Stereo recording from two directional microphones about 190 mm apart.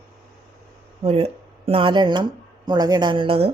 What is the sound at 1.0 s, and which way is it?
Speech, 30° right (ahead or behind).